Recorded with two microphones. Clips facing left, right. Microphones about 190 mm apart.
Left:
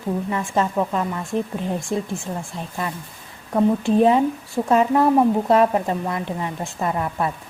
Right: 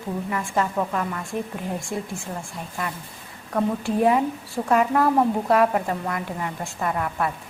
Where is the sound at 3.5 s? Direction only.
20° left (ahead or behind).